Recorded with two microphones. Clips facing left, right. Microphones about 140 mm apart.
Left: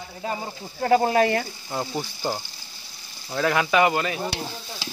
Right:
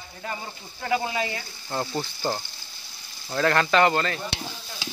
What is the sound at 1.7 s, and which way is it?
Speech, 5° left (ahead or behind).